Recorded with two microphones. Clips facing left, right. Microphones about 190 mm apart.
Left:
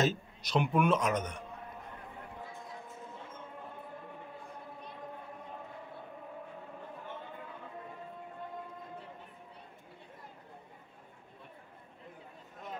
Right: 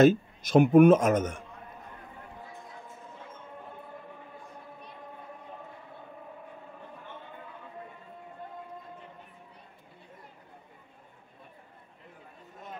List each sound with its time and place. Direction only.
0.0 s speech: 50° right (ahead or behind)